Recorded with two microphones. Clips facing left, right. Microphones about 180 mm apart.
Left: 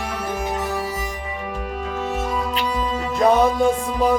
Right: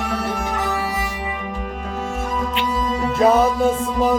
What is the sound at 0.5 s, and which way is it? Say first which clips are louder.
Music: right 1 dB; 70° right (ahead or behind).